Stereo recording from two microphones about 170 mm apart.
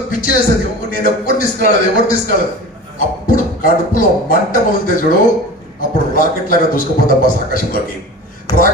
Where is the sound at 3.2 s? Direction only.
55° left (ahead or behind).